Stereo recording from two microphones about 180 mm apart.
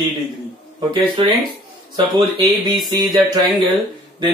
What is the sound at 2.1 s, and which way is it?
Speech, 25° right (ahead or behind).